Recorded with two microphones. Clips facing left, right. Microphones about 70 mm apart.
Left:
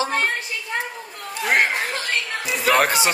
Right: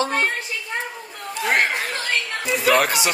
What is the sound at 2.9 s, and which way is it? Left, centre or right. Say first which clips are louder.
Speech: left 2 dB; left.